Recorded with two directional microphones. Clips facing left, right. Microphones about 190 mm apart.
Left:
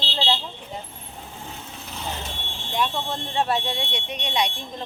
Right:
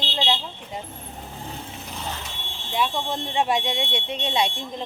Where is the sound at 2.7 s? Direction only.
5° right (ahead or behind); by 4.8 s 25° right (ahead or behind).